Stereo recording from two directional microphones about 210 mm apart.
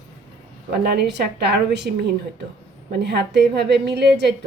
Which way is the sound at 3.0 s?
50° right (ahead or behind).